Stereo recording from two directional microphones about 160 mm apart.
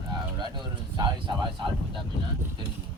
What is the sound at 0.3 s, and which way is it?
Speech, 30° right (ahead or behind).